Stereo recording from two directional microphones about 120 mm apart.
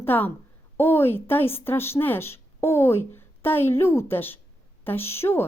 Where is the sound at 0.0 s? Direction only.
15° left (ahead or behind).